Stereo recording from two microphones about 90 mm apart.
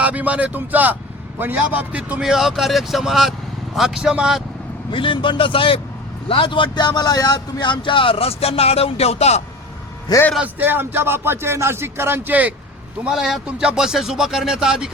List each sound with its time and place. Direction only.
0.0 s speech: 15° right (ahead or behind)
4.9 s a man's voice: 65° left (ahead or behind); by 8.9 s 90° left
10.1 s a man's voice: 45° left (ahead or behind)
10.4 s speech: 20° right (ahead or behind)
13.1 s speech: 5° right (ahead or behind)